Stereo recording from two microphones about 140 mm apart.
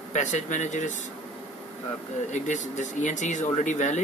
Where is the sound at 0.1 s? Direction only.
60° left (ahead or behind).